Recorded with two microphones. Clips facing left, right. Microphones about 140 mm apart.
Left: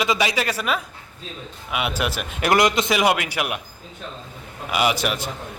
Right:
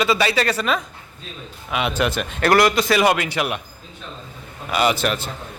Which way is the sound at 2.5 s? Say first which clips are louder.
Right 2 dB; 20° left (ahead or behind).